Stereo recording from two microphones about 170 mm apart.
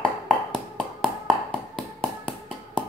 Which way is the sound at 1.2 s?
5° left (ahead or behind).